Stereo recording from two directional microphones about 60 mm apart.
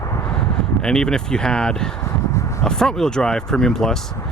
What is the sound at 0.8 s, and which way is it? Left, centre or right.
Speech, centre.